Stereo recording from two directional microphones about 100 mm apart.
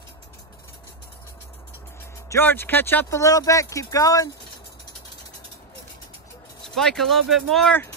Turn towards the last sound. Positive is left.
turn(degrees=5)  # may be behind; listen again after turning